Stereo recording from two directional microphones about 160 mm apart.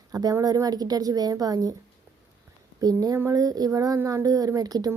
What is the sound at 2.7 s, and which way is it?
Speech, 25° right (ahead or behind).